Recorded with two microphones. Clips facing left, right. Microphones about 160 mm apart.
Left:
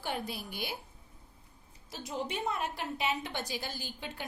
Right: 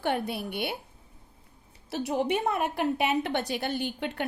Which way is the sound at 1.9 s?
70° right (ahead or behind).